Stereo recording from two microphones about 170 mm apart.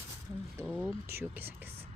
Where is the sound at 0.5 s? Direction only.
10° right (ahead or behind).